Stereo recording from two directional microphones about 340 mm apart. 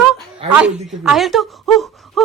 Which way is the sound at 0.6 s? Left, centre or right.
Centre.